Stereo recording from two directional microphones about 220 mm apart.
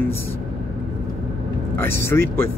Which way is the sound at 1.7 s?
10° left (ahead or behind).